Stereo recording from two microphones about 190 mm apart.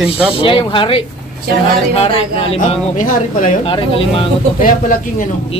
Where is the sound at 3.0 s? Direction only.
45° left (ahead or behind).